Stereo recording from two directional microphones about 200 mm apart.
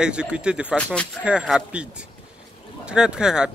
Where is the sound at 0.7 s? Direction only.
5° left (ahead or behind).